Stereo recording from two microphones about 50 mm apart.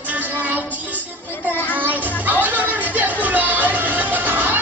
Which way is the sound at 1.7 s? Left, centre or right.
Right.